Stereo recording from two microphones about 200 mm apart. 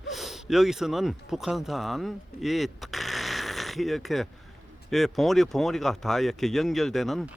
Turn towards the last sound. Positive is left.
turn(degrees=0)  # may be behind; listen again after turning